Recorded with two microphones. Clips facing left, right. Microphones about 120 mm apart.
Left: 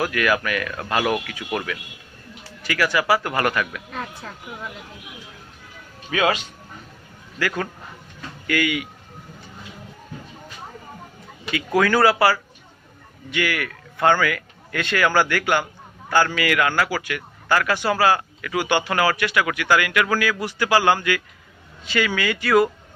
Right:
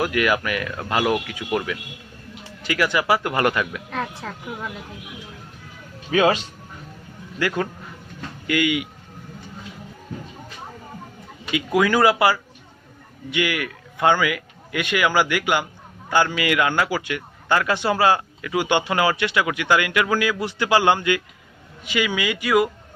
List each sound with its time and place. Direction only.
0.0 s speech: 20° right (ahead or behind)
6.1 s speech: 30° right (ahead or behind)
11.5 s a man's voice: 15° right (ahead or behind)